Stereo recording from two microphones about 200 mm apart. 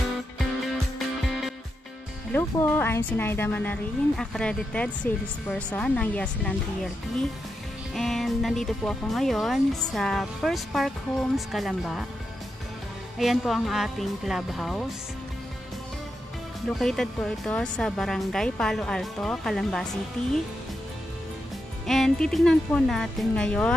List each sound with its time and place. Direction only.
2.3 s speech: 10° left (ahead or behind)
13.2 s speech: centre (ahead or behind)
16.6 s speech: centre (ahead or behind)
21.8 s speech: centre (ahead or behind)